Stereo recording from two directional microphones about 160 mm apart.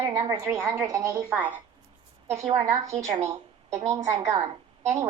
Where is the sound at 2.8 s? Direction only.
20° right (ahead or behind).